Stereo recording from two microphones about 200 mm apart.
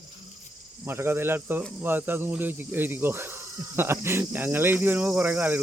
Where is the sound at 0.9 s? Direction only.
10° right (ahead or behind).